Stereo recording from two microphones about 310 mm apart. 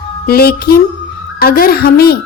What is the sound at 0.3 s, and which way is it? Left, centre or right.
A woman's voice, left.